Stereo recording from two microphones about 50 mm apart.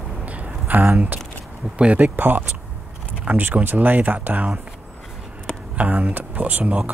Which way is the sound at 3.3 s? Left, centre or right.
Right.